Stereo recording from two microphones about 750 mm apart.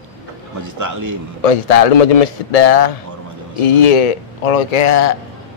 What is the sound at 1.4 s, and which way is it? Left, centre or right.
A man's voice, left.